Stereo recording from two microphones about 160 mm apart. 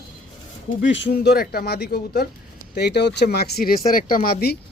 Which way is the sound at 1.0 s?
90° left.